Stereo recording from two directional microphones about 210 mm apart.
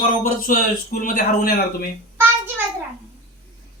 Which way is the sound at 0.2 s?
40° left (ahead or behind).